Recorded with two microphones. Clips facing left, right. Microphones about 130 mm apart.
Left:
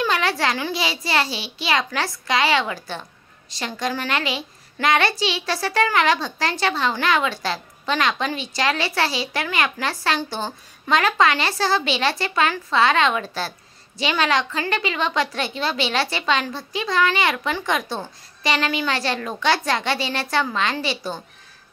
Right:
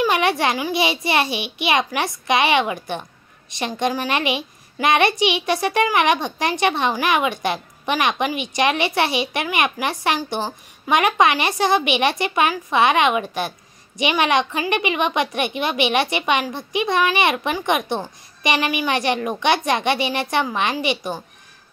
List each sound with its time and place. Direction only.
0.0 s a woman's voice: 20° right (ahead or behind)